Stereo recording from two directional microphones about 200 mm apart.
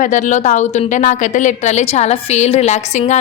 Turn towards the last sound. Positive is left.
turn(degrees=35)  # may be behind; listen again after turning